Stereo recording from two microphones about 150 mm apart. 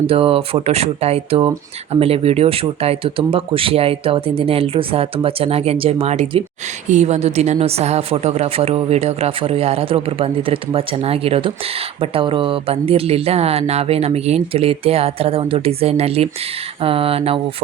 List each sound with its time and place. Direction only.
0.1 s a woman's voice: 40° right (ahead or behind)